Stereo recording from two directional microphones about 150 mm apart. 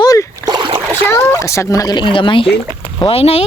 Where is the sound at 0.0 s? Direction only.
25° left (ahead or behind).